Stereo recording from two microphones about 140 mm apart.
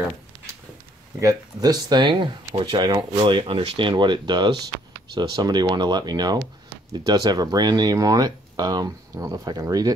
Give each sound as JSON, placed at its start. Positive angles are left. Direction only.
{"t": 1.2, "sound": "speech", "side_deg": -30}